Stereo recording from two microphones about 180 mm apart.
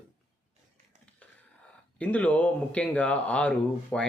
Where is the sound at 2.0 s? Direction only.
10° left (ahead or behind).